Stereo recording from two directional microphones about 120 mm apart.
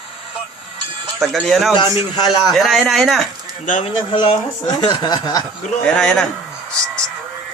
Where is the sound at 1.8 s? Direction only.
40° left (ahead or behind).